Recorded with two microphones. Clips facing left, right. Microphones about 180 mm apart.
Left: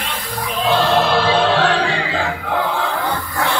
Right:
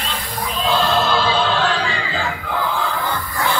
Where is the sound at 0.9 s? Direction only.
65° left (ahead or behind).